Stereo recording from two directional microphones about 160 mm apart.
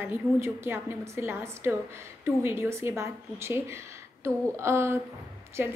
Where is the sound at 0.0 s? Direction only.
15° right (ahead or behind).